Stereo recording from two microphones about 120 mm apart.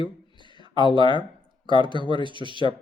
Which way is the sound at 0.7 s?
40° right (ahead or behind).